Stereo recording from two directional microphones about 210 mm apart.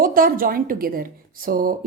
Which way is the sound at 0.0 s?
40° right (ahead or behind).